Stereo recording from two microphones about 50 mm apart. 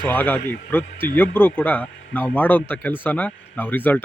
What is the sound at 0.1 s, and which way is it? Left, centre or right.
A man's voice, left.